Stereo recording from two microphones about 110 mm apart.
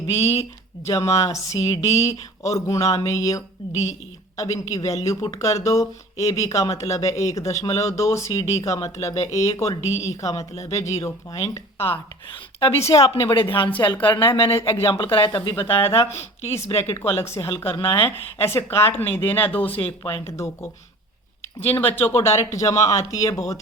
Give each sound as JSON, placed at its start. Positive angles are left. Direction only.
{"t": 0.1, "sound": "speech", "side_deg": 25}
{"t": 12.8, "sound": "a woman's voice", "side_deg": 65}
{"t": 13.3, "sound": "speech", "side_deg": 50}
{"t": 14.1, "sound": "speech", "side_deg": 20}
{"t": 14.8, "sound": "speech", "side_deg": 50}
{"t": 15.7, "sound": "speech", "side_deg": 25}
{"t": 21.7, "sound": "speech", "side_deg": 20}